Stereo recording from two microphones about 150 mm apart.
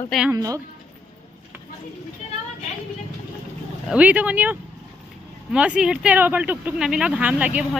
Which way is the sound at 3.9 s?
10° right (ahead or behind).